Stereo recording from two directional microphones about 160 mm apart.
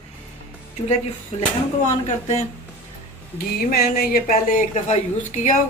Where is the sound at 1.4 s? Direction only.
45° left (ahead or behind).